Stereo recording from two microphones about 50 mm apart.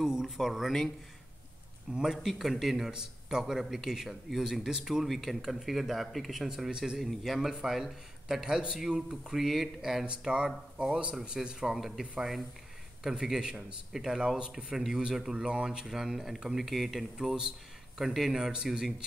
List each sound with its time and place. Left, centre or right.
0.0 s speech: centre
1.9 s a man's voice: centre
5.0 s a man's voice: centre
10.0 s a man's voice: centre